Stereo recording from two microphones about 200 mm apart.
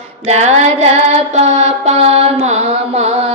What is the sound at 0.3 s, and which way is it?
Child singing, 35° right (ahead or behind).